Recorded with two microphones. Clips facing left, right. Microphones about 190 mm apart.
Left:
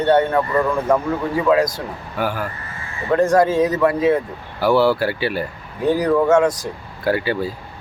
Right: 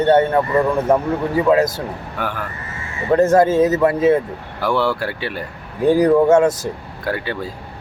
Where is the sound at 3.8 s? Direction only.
25° right (ahead or behind).